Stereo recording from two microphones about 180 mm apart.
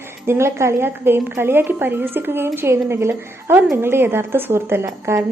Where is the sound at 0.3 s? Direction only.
15° right (ahead or behind).